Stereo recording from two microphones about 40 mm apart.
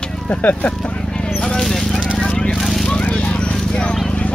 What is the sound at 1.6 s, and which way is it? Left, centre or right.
Horse, centre.